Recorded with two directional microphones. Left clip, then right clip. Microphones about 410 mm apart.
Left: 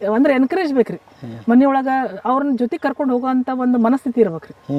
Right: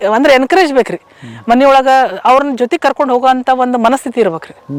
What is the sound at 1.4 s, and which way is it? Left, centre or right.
A man's voice, centre.